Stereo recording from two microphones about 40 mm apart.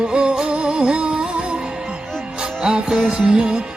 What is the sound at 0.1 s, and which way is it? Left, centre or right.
Music, right.